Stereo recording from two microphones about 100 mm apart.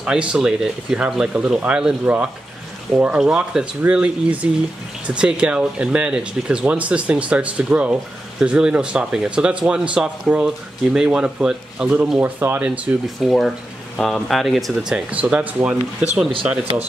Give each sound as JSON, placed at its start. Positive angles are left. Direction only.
{"t": 0.0, "sound": "speech", "side_deg": -10}
{"t": 12.2, "sound": "speech", "side_deg": -20}
{"t": 13.2, "sound": "speech", "side_deg": 0}